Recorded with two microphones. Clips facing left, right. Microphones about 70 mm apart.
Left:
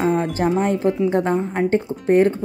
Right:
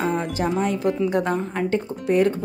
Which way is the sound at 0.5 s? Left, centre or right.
Left.